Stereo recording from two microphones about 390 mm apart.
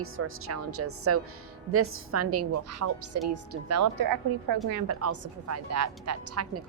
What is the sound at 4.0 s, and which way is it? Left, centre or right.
Speech, right.